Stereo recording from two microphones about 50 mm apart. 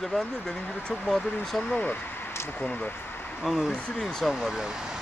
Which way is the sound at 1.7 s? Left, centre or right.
Left.